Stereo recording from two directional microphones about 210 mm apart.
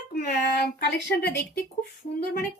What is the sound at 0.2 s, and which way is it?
Speech, 45° left (ahead or behind).